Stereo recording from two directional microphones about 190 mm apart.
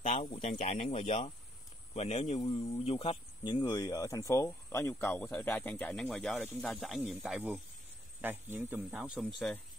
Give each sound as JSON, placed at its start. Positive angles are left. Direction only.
{"t": 0.0, "sound": "speech", "side_deg": 35}